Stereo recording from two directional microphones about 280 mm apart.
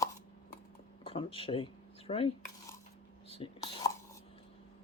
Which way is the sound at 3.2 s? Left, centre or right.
Centre.